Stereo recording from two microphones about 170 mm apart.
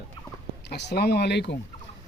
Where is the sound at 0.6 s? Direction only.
75° left (ahead or behind).